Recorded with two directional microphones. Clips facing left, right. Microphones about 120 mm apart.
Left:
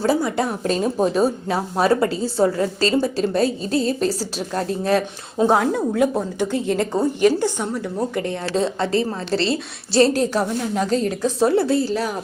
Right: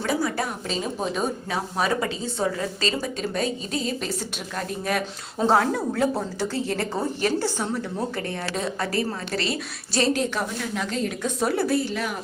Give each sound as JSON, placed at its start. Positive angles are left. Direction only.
{"t": 0.0, "sound": "a woman's voice", "side_deg": 30}
{"t": 0.9, "sound": "a woman's voice", "side_deg": 35}
{"t": 5.4, "sound": "a woman's voice", "side_deg": 15}